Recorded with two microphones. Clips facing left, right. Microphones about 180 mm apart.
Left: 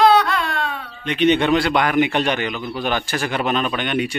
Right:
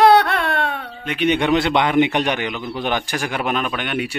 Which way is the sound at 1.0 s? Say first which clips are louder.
Left 3 dB; 5° right (ahead or behind).